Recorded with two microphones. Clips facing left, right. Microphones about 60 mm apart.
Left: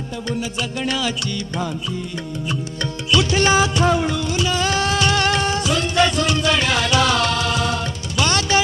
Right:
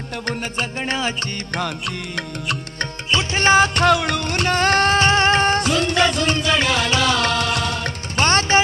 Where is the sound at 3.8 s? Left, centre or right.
Right.